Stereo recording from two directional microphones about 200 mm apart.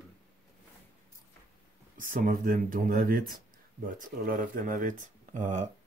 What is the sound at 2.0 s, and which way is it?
Speech, 45° right (ahead or behind).